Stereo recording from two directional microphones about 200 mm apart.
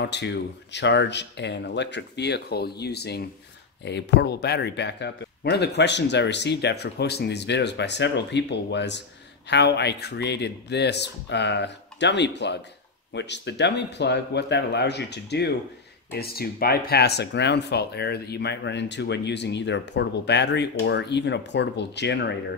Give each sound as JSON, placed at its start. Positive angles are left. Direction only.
{"t": 0.0, "sound": "speech", "side_deg": 60}